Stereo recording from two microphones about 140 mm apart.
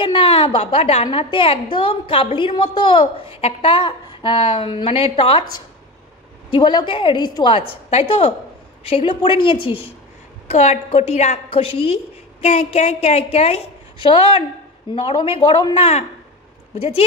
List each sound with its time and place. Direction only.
0.0 s a woman's voice: 40° left (ahead or behind)
3.3 s a woman's voice: 45° left (ahead or behind)
10.5 s a woman's voice: 50° left (ahead or behind)
14.9 s a woman's voice: 40° left (ahead or behind)